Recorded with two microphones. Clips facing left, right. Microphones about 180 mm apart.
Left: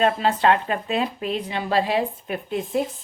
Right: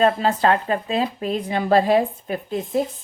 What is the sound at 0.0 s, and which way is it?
Speech, 40° right (ahead or behind).